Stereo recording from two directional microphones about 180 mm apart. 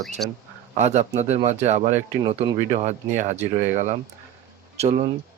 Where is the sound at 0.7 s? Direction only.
40° right (ahead or behind).